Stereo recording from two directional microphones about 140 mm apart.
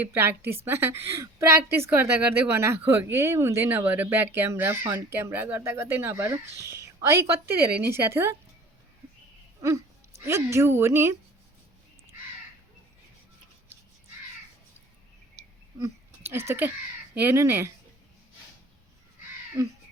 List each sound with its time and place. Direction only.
0.0 s a woman's voice: 15° right (ahead or behind)
9.6 s a woman's voice: 25° right (ahead or behind)
15.4 s a sound: 15° right (ahead or behind)
17.2 s a woman's voice: 15° right (ahead or behind)